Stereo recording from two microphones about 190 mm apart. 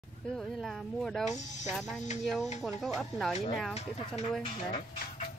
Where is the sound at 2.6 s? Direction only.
Centre (ahead or behind).